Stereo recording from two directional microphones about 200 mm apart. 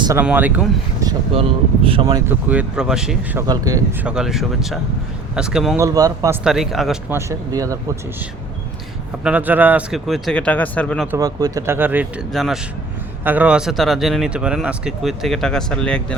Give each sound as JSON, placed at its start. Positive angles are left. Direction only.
{"t": 0.0, "sound": "speech", "side_deg": -10}
{"t": 1.0, "sound": "speech", "side_deg": -30}
{"t": 2.3, "sound": "speech", "side_deg": -5}
{"t": 3.4, "sound": "speech", "side_deg": -20}
{"t": 4.0, "sound": "speech", "side_deg": -5}
{"t": 5.8, "sound": "speech", "side_deg": -20}
{"t": 6.4, "sound": "speech", "side_deg": 0}
{"t": 7.1, "sound": "speech", "side_deg": -15}
{"t": 9.2, "sound": "speech", "side_deg": -10}
{"t": 11.1, "sound": "speech", "side_deg": -20}